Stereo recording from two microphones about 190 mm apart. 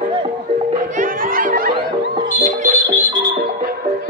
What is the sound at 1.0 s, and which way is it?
Music, 50° right (ahead or behind).